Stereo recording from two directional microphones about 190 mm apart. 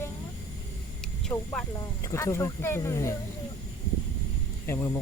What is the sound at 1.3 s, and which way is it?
Speech, 10° left (ahead or behind).